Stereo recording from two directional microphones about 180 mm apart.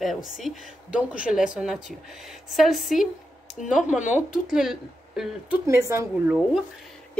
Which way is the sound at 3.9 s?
40° left (ahead or behind).